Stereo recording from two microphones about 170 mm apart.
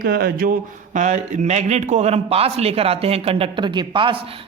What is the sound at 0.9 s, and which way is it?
A man's voice, 45° right (ahead or behind).